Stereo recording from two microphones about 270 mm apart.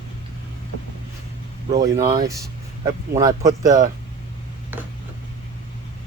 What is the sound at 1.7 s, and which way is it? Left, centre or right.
Speech, centre.